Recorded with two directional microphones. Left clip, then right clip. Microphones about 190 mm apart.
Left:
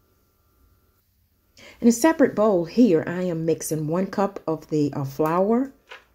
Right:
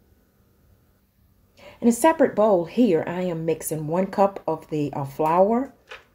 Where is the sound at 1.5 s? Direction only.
20° left (ahead or behind).